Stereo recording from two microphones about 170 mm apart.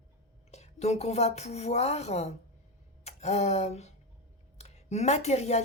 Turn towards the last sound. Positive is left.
turn(degrees=40)  # may be behind; listen again after turning